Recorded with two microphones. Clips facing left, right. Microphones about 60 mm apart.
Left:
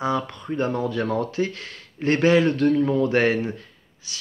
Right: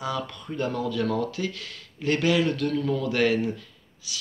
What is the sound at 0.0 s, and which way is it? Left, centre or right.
Speech, left.